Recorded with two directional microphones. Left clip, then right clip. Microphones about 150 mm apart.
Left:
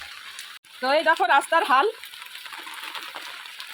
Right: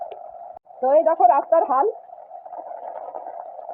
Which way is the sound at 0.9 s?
15° left (ahead or behind).